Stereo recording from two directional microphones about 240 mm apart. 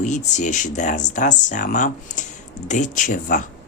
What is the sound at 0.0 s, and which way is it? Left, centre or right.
Speech, left.